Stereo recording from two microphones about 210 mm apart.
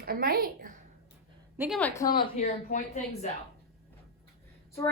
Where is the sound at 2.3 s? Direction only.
35° left (ahead or behind).